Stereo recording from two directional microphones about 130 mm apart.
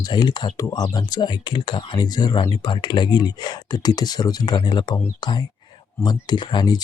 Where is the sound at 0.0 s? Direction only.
35° left (ahead or behind).